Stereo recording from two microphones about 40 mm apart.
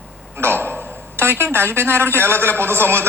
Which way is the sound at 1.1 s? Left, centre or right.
Right.